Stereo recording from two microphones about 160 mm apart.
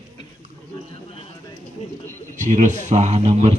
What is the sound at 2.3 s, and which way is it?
A man's voice, 50° right (ahead or behind).